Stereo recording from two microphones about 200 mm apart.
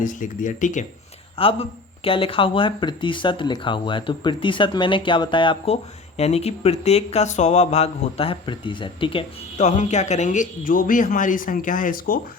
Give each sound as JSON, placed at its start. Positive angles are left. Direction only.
{"t": 0.0, "sound": "speech", "side_deg": 40}
{"t": 1.4, "sound": "speech", "side_deg": 25}